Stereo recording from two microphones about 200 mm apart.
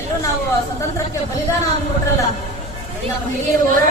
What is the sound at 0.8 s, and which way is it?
Speech, 15° left (ahead or behind).